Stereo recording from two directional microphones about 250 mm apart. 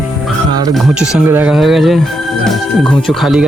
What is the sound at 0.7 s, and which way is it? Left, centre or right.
Speech, centre.